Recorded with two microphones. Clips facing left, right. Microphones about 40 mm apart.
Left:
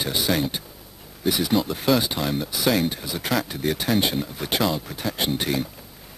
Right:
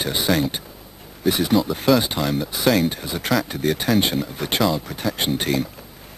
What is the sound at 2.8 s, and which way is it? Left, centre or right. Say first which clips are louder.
Speech: right 3 dB; centre.